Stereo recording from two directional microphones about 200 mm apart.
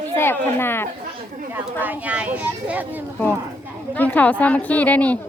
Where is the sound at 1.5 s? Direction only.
10° right (ahead or behind).